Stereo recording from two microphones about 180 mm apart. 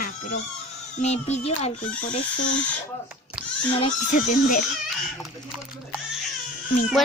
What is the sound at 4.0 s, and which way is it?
Speech, 45° left (ahead or behind).